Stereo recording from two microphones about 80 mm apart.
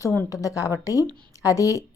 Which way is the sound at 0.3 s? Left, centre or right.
Left.